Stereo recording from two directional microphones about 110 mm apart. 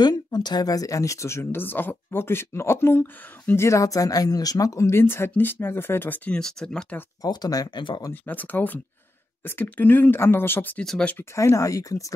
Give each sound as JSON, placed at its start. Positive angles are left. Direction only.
{"t": 0.0, "sound": "speech", "side_deg": 40}
{"t": 7.2, "sound": "speech", "side_deg": 35}
{"t": 8.1, "sound": "speech", "side_deg": 15}
{"t": 11.1, "sound": "speech", "side_deg": 25}